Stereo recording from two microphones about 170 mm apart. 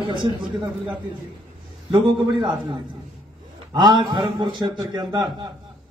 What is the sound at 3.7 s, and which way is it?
A man's voice, 25° right (ahead or behind).